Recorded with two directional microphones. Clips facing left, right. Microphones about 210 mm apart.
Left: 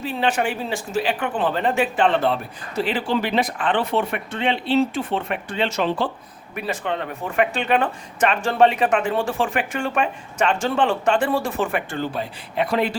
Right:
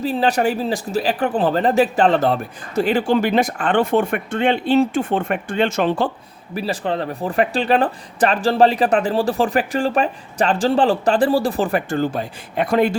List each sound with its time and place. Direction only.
0.0 s speech: 35° right (ahead or behind)
6.5 s speech: 35° right (ahead or behind)